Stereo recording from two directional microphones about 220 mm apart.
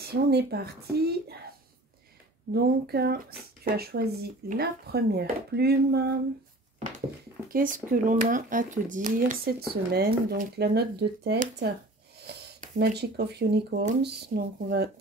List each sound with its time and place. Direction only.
0.0 s speech: 45° right (ahead or behind)
2.5 s speech: 45° right (ahead or behind)
7.4 s speech: 40° right (ahead or behind)
12.7 s speech: 50° right (ahead or behind)